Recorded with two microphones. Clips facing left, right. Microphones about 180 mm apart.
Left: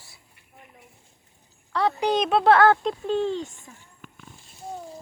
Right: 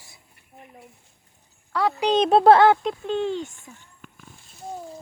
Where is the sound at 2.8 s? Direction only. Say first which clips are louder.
Left 1 dB; 5° left (ahead or behind).